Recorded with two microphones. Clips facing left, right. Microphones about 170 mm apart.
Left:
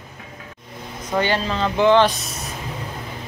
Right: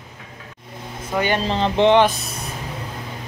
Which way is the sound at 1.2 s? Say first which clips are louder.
Right 2 dB; 20° right (ahead or behind).